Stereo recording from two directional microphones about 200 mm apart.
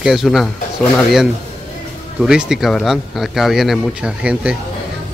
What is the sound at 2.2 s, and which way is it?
A man's voice, 5° right (ahead or behind).